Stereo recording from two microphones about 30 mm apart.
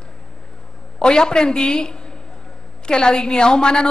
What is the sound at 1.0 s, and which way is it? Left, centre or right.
A woman's voice, left.